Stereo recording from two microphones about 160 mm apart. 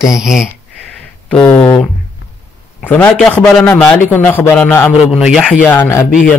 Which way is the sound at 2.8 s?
10° left (ahead or behind).